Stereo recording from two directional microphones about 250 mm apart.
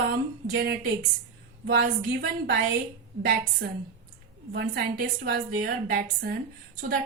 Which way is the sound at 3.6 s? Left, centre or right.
Right.